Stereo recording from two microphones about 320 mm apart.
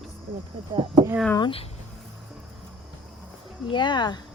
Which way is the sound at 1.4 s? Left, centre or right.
Centre.